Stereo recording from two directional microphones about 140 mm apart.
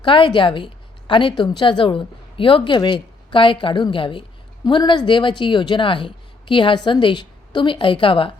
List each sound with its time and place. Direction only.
0.0 s a woman's voice: 35° left (ahead or behind)